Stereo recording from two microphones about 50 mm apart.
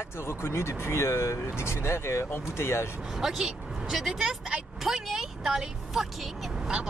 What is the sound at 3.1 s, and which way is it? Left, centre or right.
Speech, centre.